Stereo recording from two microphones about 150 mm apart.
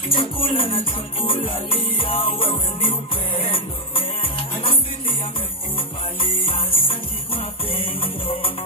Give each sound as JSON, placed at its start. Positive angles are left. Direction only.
{"t": 0.1, "sound": "music", "side_deg": 35}
{"t": 6.4, "sound": "music", "side_deg": 35}